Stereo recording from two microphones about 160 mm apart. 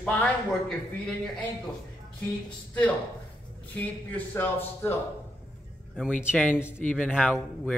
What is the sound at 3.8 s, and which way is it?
A man's voice, 10° left (ahead or behind).